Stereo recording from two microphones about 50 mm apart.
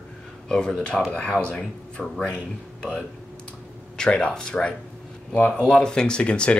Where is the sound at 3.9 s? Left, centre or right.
Centre.